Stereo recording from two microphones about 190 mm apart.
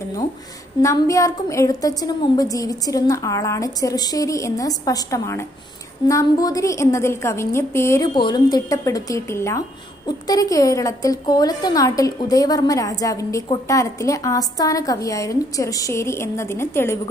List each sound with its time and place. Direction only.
0.8 s a woman's voice: 15° left (ahead or behind)
8.1 s a woman's voice: 25° left (ahead or behind)